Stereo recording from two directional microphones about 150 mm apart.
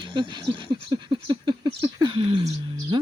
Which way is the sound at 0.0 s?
30° right (ahead or behind).